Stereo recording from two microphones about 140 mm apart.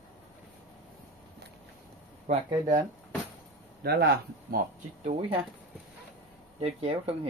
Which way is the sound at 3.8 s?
90° right.